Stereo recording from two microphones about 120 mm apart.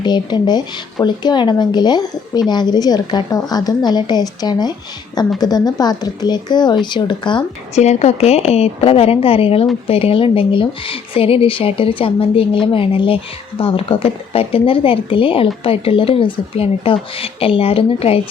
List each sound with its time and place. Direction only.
0.0 s a woman's voice: 40° left (ahead or behind)
7.8 s a woman's voice: 70° left (ahead or behind)